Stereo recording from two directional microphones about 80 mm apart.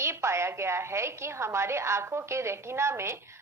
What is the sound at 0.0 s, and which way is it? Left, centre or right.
A woman's voice, right.